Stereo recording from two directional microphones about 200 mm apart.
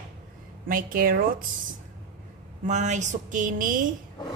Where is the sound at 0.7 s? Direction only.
45° right (ahead or behind).